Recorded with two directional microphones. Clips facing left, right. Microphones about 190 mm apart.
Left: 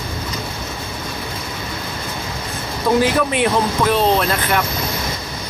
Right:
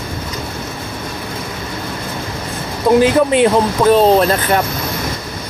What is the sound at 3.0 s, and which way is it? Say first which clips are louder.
Speech: right 7 dB; 25° right (ahead or behind).